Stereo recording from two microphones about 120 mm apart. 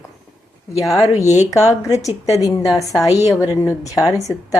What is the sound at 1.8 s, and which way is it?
Speech, 25° left (ahead or behind).